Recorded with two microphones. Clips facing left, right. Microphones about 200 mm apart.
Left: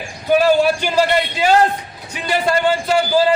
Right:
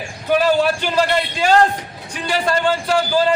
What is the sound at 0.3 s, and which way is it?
A man's voice, 10° left (ahead or behind).